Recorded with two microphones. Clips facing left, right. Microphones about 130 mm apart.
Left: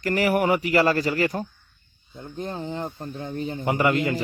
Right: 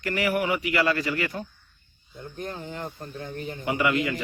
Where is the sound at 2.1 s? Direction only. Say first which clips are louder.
Left 3 dB; 25° left (ahead or behind).